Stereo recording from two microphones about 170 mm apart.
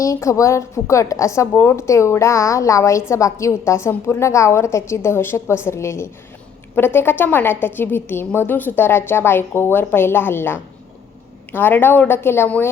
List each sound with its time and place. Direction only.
0.0 s a woman's voice: 20° left (ahead or behind)